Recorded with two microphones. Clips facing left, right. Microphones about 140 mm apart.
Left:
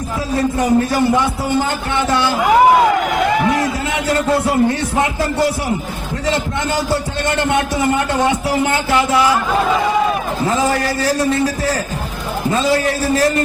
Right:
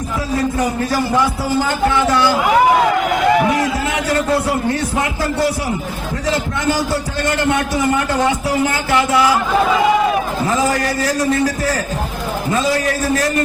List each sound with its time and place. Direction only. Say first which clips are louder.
0.8 s speech: left 2 dB; 25° left (ahead or behind)
4.3 s speech: left 2 dB; 25° left (ahead or behind)
6.3 s speech: right 2 dB; 25° left (ahead or behind)
10.4 s speech: left 2 dB; 30° left (ahead or behind)